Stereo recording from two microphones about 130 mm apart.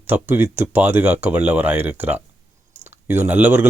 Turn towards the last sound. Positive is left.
turn(degrees=-15)  # may be behind; listen again after turning